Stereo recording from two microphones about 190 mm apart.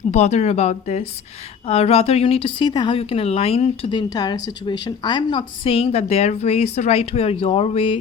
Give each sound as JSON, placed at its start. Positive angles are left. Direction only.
{"t": 0.1, "sound": "a woman's voice", "side_deg": 35}